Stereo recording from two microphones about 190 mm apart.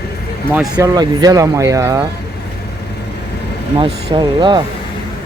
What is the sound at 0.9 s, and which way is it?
Speech, 20° right (ahead or behind).